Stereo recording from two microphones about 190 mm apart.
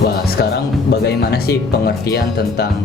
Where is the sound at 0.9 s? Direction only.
60° left (ahead or behind).